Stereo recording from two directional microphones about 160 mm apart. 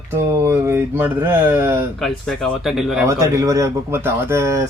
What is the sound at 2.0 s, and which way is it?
Speech, centre (ahead or behind).